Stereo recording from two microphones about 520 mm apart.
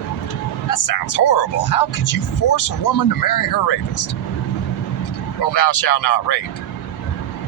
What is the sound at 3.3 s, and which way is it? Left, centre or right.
Speech, left.